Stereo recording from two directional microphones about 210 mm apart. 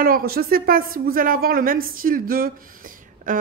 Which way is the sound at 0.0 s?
45° right (ahead or behind).